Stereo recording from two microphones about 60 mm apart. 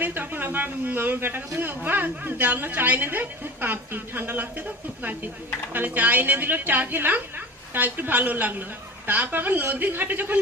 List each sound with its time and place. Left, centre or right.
0.0 s a man's voice: right
5.7 s a man's voice: right